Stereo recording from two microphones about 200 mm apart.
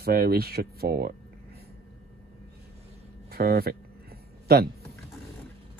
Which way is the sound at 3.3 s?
50° right (ahead or behind).